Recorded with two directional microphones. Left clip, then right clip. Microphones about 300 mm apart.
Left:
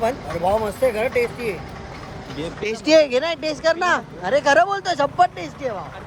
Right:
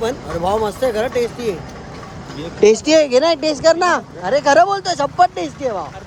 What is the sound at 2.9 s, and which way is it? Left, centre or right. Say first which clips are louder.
Speech: right 3 dB; centre.